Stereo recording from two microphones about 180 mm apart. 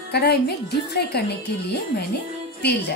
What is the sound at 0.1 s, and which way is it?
A woman's voice, 65° left (ahead or behind).